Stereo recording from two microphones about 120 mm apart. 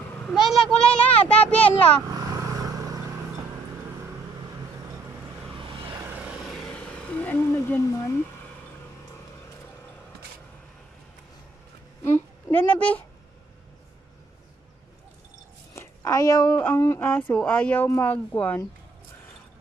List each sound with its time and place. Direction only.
0.3 s a child's voice: centre (ahead or behind)
2.5 s vehicle: 30° right (ahead or behind)
5.6 s vehicle: 45° right (ahead or behind)
5.9 s vehicle: 15° right (ahead or behind)
6.4 s a sound: 5° left (ahead or behind)
12.0 s a sound: 20° left (ahead or behind)
15.7 s speech: 20° left (ahead or behind)